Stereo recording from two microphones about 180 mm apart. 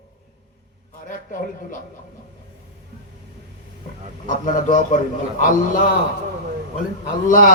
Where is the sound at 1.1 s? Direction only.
50° left (ahead or behind).